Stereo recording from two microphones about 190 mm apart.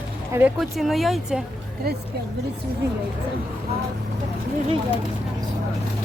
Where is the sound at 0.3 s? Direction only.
5° right (ahead or behind).